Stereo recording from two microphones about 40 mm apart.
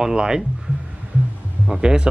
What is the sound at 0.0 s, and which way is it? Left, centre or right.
Speech, centre.